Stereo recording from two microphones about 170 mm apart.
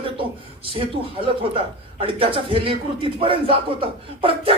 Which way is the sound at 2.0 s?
30° right (ahead or behind).